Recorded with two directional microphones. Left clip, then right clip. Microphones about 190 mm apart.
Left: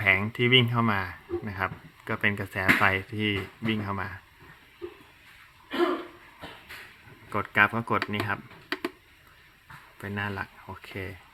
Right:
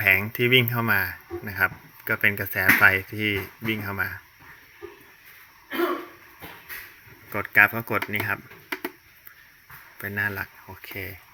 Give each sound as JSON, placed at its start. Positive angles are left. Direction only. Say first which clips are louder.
{"t": 0.0, "sound": "speech", "louder": "right 3 dB", "side_deg": 5}
{"t": 7.3, "sound": "speech", "louder": "right 4 dB", "side_deg": 10}
{"t": 10.0, "sound": "speech", "louder": "right 5 dB", "side_deg": 5}
{"t": 10.8, "sound": "speech", "louder": "right 3 dB", "side_deg": 15}